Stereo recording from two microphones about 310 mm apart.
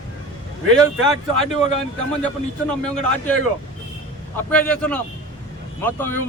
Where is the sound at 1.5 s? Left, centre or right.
Left.